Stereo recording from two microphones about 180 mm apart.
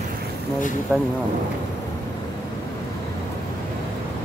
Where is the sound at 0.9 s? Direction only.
10° right (ahead or behind).